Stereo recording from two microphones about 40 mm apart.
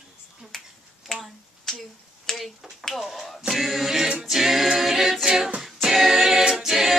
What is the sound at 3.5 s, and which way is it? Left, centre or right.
A capella, centre.